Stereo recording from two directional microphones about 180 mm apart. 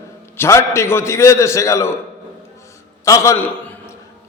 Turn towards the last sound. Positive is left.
turn(degrees=10)  # may be behind; listen again after turning